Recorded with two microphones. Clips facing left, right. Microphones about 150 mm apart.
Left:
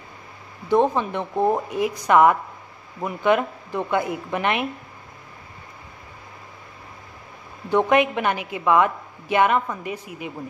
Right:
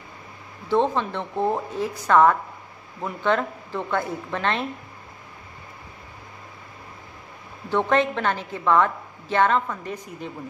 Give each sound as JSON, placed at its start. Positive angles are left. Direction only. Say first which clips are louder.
{"t": 0.7, "sound": "a woman's voice", "louder": "left 2 dB", "side_deg": 15}
{"t": 7.7, "sound": "a woman's voice", "louder": "left 3 dB", "side_deg": 15}